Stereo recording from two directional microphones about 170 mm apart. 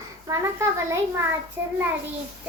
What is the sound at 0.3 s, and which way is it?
Speech, 20° right (ahead or behind).